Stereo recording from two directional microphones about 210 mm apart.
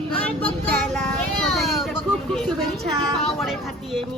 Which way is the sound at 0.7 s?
5° left (ahead or behind).